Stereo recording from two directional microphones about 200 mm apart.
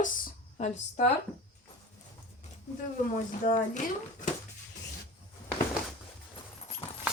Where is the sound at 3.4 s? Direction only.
40° left (ahead or behind).